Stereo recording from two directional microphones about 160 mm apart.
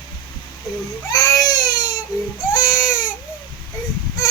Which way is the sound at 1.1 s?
25° left (ahead or behind).